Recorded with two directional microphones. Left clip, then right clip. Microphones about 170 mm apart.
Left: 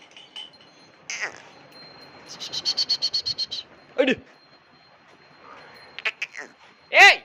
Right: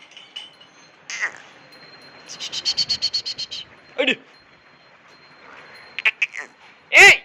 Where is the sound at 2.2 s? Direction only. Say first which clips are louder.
Right 3 dB; 30° left (ahead or behind).